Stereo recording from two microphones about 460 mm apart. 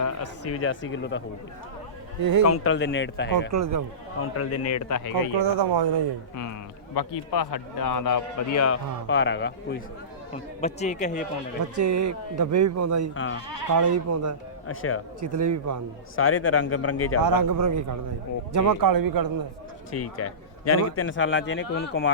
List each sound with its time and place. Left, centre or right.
0.0 s speech: left
2.4 s a man's voice: left
3.5 s speech: right
4.4 s a man's voice: left
5.1 s speech: right
6.9 s a man's voice: left
7.9 s a man's voice: left; by 11.3 s centre
11.7 s speech: right
14.7 s a man's voice: left
15.3 s speech: right
16.1 s a man's voice: left
17.2 s a man's voice: right
20.0 s a man's voice: left